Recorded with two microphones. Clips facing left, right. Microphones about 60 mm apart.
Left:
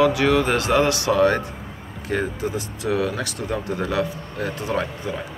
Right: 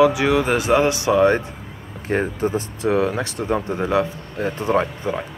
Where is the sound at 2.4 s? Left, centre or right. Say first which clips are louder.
Right 5 dB; right.